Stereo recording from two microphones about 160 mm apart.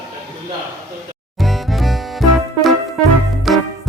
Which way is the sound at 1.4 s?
Centre (ahead or behind).